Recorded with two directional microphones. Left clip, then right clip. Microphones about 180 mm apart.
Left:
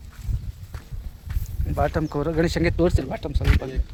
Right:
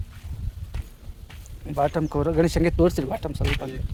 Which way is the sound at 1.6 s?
20° right (ahead or behind).